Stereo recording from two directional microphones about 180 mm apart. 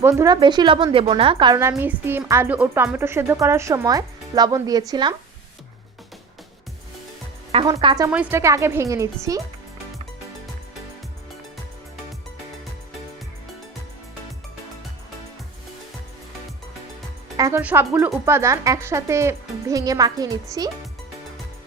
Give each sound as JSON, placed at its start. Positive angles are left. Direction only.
{"t": 0.0, "sound": "a woman's voice", "side_deg": -15}
{"t": 1.7, "sound": "a woman's voice", "side_deg": -10}
{"t": 7.5, "sound": "a woman's voice", "side_deg": -25}
{"t": 8.0, "sound": "a woman's voice", "side_deg": -10}
{"t": 17.3, "sound": "a woman's voice", "side_deg": -20}